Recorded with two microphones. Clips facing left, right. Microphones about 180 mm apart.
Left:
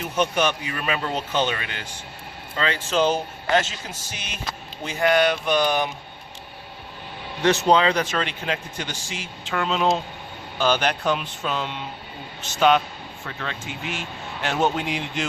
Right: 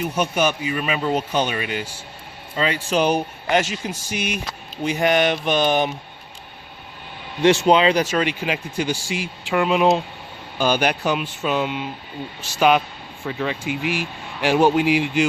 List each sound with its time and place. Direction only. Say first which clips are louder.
0.0 s a man's voice: right 2 dB; 10° right (ahead or behind)
4.9 s mantra: right 1 dB; 20° right (ahead or behind)
7.6 s a man's voice: right 3 dB; 15° right (ahead or behind)